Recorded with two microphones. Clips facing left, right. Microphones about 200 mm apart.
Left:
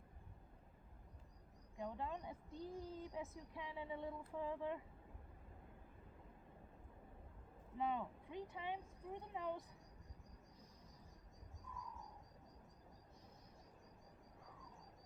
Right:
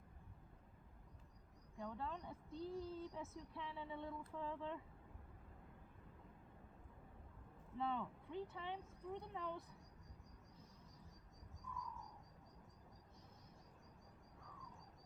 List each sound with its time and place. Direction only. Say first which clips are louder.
1.8 s speech: left 2 dB; 15° left (ahead or behind)
7.8 s speech: left 1 dB; 15° left (ahead or behind)